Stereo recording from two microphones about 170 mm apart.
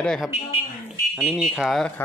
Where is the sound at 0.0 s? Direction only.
5° left (ahead or behind).